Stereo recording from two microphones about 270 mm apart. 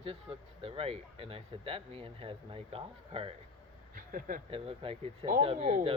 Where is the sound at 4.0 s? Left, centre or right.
Right.